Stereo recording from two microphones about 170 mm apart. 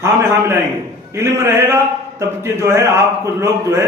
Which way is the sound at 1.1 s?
15° right (ahead or behind).